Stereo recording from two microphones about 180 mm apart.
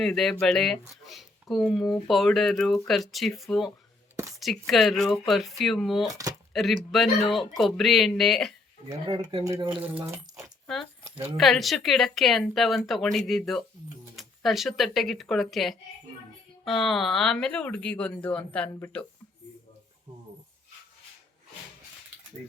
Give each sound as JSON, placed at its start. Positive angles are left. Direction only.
{"t": 0.0, "sound": "speech", "side_deg": 0}
{"t": 9.0, "sound": "speech", "side_deg": -25}
{"t": 9.7, "sound": "speech", "side_deg": -10}
{"t": 10.7, "sound": "keys jangling", "side_deg": 0}
{"t": 11.3, "sound": "speech", "side_deg": 0}